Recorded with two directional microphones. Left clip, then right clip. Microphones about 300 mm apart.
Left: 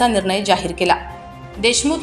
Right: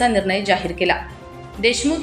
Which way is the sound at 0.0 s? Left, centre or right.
Centre.